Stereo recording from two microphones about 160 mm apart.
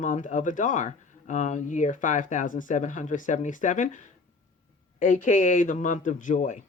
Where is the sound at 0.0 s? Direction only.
50° left (ahead or behind).